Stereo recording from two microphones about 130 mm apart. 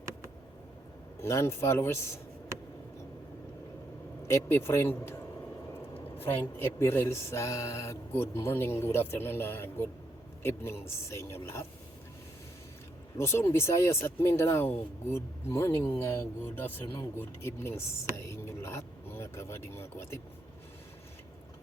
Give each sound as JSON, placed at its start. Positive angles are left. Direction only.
{"t": 1.2, "sound": "speech", "side_deg": 20}
{"t": 4.3, "sound": "speech", "side_deg": 20}
{"t": 6.2, "sound": "a sound", "side_deg": 15}
{"t": 10.4, "sound": "speech", "side_deg": 20}
{"t": 13.1, "sound": "speech", "side_deg": 20}